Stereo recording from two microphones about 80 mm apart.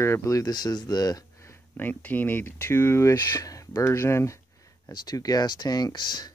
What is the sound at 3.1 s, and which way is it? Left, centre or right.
Speech, left.